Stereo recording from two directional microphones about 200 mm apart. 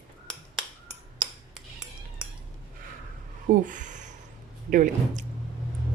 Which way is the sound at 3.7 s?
40° right (ahead or behind).